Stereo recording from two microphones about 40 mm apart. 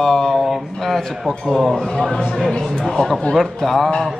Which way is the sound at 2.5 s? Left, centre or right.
Centre.